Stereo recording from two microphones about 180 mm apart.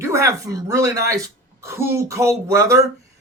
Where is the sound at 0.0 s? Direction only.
15° right (ahead or behind).